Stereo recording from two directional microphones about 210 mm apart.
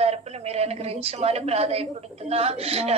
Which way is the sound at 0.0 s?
30° right (ahead or behind).